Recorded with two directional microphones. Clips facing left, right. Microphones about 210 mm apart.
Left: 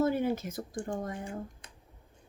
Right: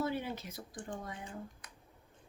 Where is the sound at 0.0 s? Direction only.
45° left (ahead or behind).